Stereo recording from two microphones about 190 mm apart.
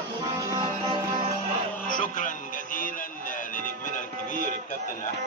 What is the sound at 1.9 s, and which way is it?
Music, 45° left (ahead or behind).